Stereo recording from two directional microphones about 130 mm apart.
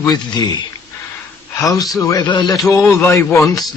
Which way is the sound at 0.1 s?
30° left (ahead or behind).